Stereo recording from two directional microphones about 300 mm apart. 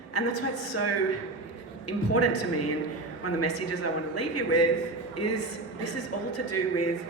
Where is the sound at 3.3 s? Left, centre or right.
Left.